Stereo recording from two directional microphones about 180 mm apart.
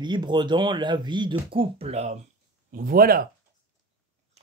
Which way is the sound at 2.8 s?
55° right (ahead or behind).